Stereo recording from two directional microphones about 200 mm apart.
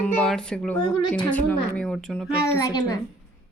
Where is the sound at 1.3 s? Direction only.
5° left (ahead or behind).